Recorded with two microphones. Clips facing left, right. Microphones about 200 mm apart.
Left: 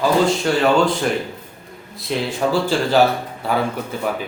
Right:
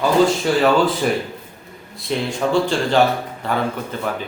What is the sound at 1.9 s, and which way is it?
Speech, 5° left (ahead or behind).